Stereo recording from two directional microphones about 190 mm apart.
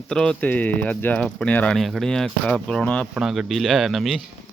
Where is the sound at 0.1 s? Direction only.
5° left (ahead or behind).